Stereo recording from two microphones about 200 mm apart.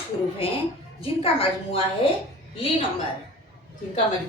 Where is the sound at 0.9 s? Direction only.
30° left (ahead or behind).